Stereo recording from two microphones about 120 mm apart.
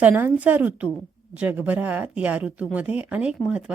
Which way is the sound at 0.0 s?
15° right (ahead or behind).